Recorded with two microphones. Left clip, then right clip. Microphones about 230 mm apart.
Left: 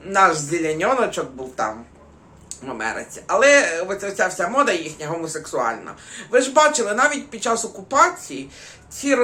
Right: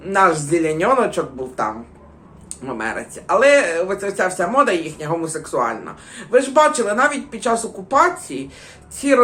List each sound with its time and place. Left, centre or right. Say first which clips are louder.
0.0 s speech: right 1 dB; centre